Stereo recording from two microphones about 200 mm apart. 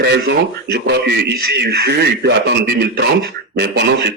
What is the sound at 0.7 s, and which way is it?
Speech, 55° right (ahead or behind).